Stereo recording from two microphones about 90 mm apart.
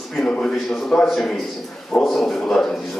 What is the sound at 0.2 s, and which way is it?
A man's voice, 10° left (ahead or behind).